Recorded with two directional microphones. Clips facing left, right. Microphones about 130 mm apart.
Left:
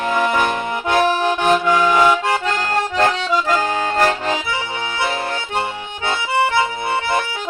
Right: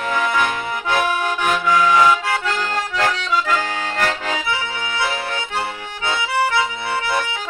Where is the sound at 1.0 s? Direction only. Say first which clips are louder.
Left 6 dB; 25° left (ahead or behind).